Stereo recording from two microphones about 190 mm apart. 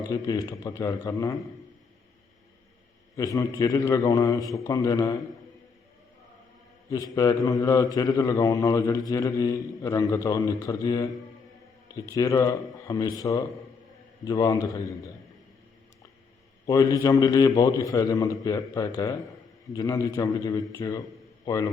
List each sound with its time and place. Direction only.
0.1 s a man's voice: 20° left (ahead or behind)
3.2 s a man's voice: 15° left (ahead or behind)
6.9 s a man's voice: 20° left (ahead or behind)
16.6 s a man's voice: 20° left (ahead or behind)